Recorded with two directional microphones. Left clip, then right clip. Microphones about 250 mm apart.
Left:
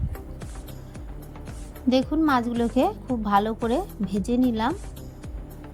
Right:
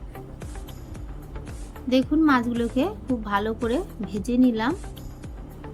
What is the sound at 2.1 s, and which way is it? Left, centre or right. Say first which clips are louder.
A woman's voice: right 2 dB; left.